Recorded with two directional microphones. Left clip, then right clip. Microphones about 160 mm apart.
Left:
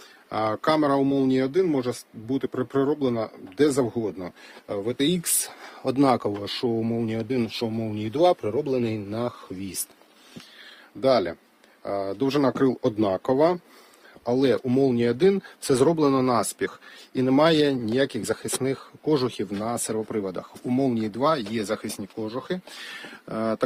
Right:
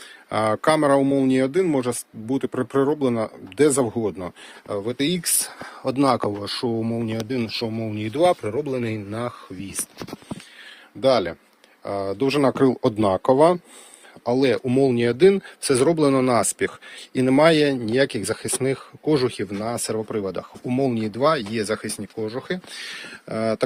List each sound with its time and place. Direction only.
0.3 s speech: 20° right (ahead or behind)
4.7 s speech: 5° left (ahead or behind)
8.8 s speech: 15° left (ahead or behind)
11.0 s speech: centre (ahead or behind); by 13.6 s 20° right (ahead or behind)
14.3 s speech: 5° right (ahead or behind)
17.2 s speech: 5° right (ahead or behind)